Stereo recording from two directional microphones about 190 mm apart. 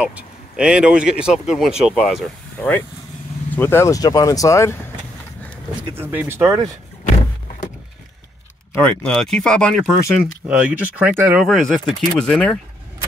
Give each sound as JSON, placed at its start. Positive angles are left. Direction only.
{"t": 0.0, "sound": "speech", "side_deg": -5}
{"t": 3.5, "sound": "speech", "side_deg": 15}
{"t": 5.9, "sound": "speech", "side_deg": -10}
{"t": 8.7, "sound": "speech", "side_deg": 5}
{"t": 11.1, "sound": "speech", "side_deg": -10}
{"t": 11.4, "sound": "speech", "side_deg": 0}